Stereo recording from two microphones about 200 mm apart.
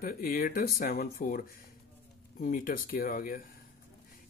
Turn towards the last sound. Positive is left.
turn(degrees=45)  # may be behind; listen again after turning